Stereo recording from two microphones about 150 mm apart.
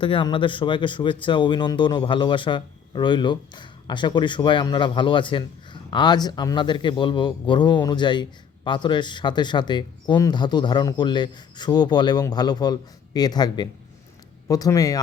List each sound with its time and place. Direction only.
0.0 s speech: 35° left (ahead or behind)